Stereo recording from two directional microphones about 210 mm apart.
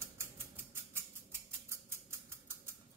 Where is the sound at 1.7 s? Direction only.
10° right (ahead or behind).